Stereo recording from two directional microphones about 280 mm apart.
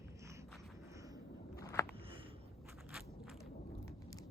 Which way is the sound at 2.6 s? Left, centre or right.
Centre.